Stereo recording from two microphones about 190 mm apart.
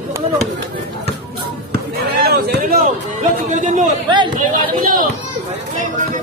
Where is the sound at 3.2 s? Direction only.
40° right (ahead or behind).